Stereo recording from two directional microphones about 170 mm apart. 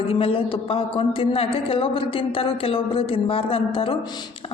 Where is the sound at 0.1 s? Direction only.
35° left (ahead or behind).